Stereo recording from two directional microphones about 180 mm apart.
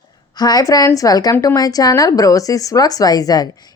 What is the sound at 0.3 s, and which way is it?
A woman's voice, 20° left (ahead or behind).